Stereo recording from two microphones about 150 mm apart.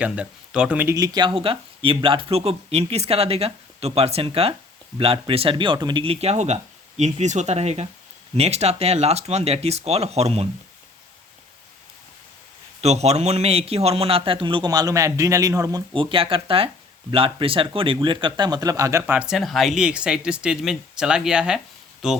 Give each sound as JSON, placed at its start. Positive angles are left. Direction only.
{"t": 0.0, "sound": "speech", "side_deg": -5}
{"t": 0.9, "sound": "a man's voice", "side_deg": -25}
{"t": 12.8, "sound": "a man's voice", "side_deg": -45}